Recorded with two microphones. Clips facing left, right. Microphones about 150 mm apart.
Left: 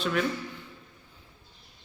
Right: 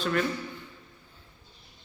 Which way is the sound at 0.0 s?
Centre (ahead or behind).